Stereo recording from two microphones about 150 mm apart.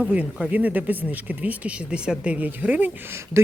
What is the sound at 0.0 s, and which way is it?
Speech, 5° right (ahead or behind).